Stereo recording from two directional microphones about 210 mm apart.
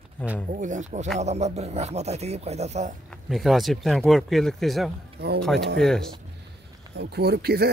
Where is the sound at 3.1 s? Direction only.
Centre (ahead or behind).